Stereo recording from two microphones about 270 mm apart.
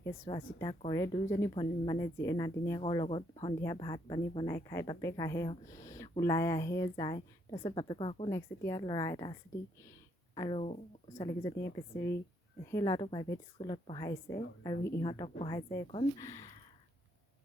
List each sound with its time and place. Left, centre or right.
0.0 s speech: centre